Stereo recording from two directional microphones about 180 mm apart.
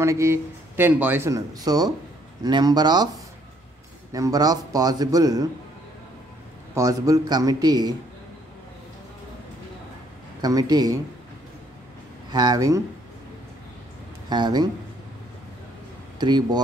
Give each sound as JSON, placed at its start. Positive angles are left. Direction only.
{"t": 0.0, "sound": "a man's voice", "side_deg": -15}
{"t": 4.1, "sound": "a man's voice", "side_deg": -20}
{"t": 6.7, "sound": "a man's voice", "side_deg": -20}
{"t": 10.4, "sound": "a man's voice", "side_deg": -20}
{"t": 12.3, "sound": "a man's voice", "side_deg": -20}
{"t": 14.3, "sound": "a man's voice", "side_deg": -25}
{"t": 16.2, "sound": "a man's voice", "side_deg": -25}